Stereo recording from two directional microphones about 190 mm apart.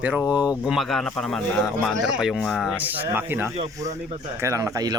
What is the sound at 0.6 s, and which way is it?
Speech, centre (ahead or behind).